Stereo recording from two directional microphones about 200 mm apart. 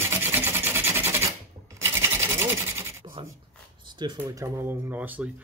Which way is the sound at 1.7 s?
10° right (ahead or behind).